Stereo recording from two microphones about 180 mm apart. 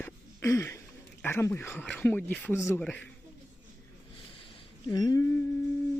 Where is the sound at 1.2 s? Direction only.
15° left (ahead or behind).